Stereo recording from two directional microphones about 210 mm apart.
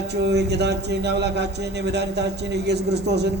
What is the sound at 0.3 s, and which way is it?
Speech, 55° right (ahead or behind).